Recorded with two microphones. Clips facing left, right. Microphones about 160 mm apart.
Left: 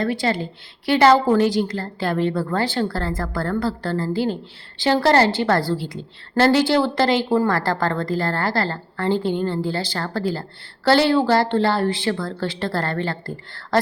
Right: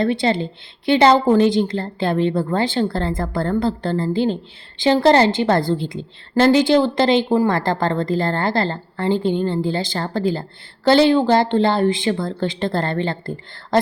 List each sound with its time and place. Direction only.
0.0 s speech: 25° right (ahead or behind)